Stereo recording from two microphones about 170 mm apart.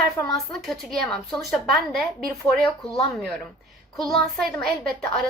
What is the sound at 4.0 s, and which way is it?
Speech, centre (ahead or behind).